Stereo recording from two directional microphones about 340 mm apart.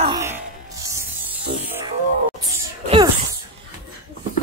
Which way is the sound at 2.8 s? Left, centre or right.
Centre.